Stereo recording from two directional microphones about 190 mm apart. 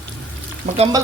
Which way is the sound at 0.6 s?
55° right (ahead or behind).